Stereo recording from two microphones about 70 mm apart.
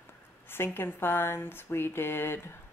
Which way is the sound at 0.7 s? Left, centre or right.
Left.